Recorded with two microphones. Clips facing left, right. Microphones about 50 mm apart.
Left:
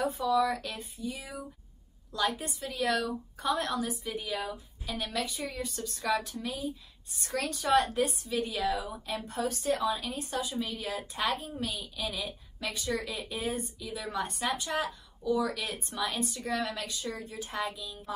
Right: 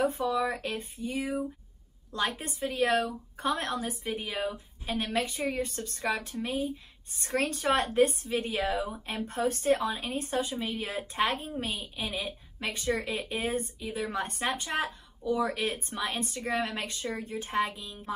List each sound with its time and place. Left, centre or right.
0.0 s a woman's voice: right